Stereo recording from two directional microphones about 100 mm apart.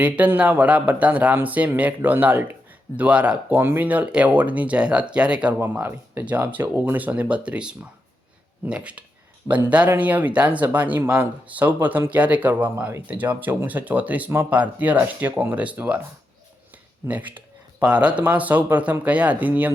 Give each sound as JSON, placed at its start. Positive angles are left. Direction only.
{"t": 0.0, "sound": "speech", "side_deg": -15}
{"t": 17.1, "sound": "speech", "side_deg": -15}